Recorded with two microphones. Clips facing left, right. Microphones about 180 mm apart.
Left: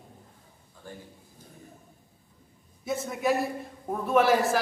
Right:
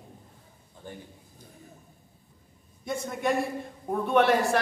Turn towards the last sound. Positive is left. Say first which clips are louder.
# even
turn(degrees=0)  # may be behind; listen again after turning